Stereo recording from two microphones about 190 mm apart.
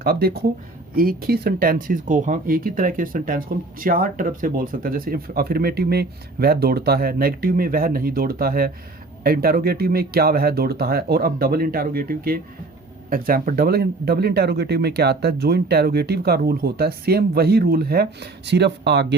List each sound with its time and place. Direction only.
0.0 s speech: 55° right (ahead or behind)